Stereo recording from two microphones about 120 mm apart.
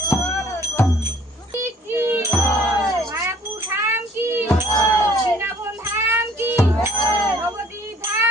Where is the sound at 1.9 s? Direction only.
15° right (ahead or behind).